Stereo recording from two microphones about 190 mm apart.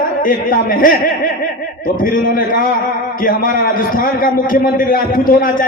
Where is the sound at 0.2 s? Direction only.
45° left (ahead or behind).